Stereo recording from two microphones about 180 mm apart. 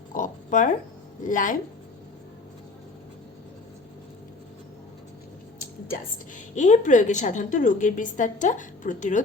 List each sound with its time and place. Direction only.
0.1 s a sound: 45° left (ahead or behind)
1.2 s a woman's voice: 45° left (ahead or behind)
6.6 s a woman's voice: 45° left (ahead or behind)